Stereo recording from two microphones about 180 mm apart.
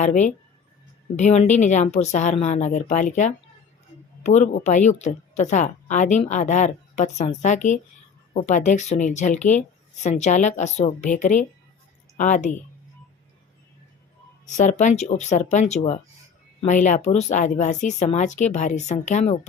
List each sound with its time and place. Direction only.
0.0 s a woman's voice: 40° left (ahead or behind)
14.4 s a woman's voice: 40° left (ahead or behind)